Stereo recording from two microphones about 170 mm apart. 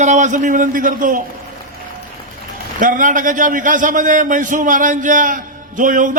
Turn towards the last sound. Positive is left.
turn(degrees=-50)  # may be behind; listen again after turning